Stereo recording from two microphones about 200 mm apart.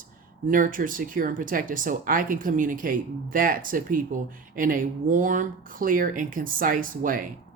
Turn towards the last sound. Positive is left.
turn(degrees=-45)  # may be behind; listen again after turning